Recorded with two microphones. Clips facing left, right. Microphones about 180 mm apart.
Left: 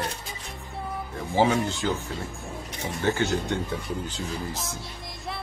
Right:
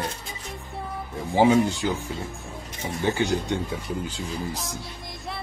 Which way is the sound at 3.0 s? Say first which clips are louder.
Right 1 dB; 15° right (ahead or behind).